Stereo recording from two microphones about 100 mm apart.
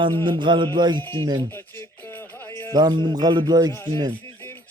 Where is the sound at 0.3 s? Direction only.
55° right (ahead or behind).